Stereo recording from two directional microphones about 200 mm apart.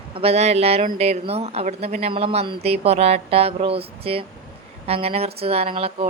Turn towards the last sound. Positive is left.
turn(degrees=-30)  # may be behind; listen again after turning